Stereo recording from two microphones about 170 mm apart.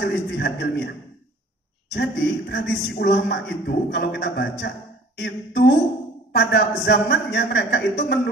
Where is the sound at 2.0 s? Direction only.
75° left (ahead or behind).